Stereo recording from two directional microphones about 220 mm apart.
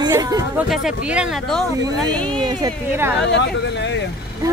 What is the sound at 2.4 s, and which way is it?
Speech, 15° right (ahead or behind).